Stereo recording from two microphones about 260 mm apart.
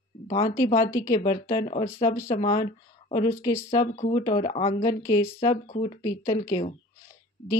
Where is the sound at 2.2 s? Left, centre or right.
Centre.